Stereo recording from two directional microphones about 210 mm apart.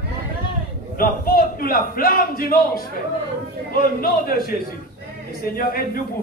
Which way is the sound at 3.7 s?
45° left (ahead or behind).